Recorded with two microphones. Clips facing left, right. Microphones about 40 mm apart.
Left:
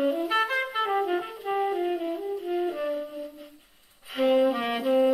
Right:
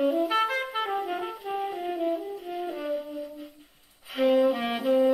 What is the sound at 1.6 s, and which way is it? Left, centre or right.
Saxophone, centre.